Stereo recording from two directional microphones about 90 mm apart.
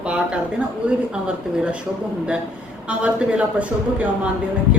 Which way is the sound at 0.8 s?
15° right (ahead or behind).